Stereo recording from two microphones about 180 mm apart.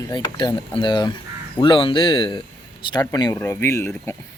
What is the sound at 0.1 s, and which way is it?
Speech, 25° left (ahead or behind).